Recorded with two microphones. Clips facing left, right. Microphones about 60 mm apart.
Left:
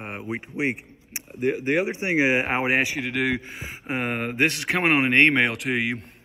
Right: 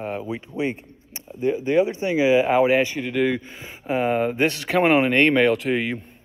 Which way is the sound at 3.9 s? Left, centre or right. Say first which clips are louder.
Right 6 dB; left.